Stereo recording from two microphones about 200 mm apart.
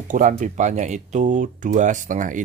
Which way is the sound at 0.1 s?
40° right (ahead or behind).